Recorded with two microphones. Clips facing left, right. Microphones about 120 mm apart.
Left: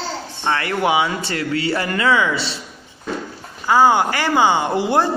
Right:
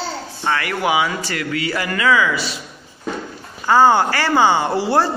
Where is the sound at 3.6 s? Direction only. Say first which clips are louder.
Right 1 dB; 10° left (ahead or behind).